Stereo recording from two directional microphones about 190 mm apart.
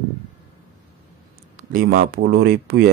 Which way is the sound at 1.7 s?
45° right (ahead or behind).